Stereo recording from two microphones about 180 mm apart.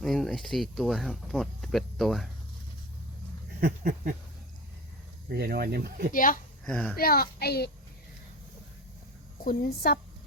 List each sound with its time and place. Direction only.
0.0 s speech: centre (ahead or behind)
3.6 s a sound: 50° right (ahead or behind)
5.3 s speech: 60° right (ahead or behind)
6.1 s speech: 50° left (ahead or behind)
6.7 s speech: 5° left (ahead or behind)
6.9 s a child's voice: 60° left (ahead or behind)
9.4 s a child's voice: 55° left (ahead or behind)